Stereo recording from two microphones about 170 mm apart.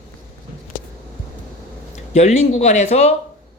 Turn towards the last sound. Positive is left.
turn(degrees=40)  # may be behind; listen again after turning